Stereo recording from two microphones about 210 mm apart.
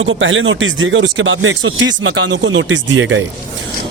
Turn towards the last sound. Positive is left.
turn(degrees=-65)  # may be behind; listen again after turning